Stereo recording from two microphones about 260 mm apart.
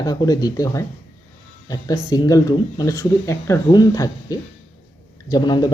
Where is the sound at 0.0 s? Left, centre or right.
Centre.